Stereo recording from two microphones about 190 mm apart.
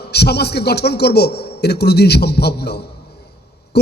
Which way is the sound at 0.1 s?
60° left (ahead or behind).